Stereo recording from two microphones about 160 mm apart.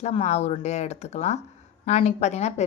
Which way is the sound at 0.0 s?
40° left (ahead or behind).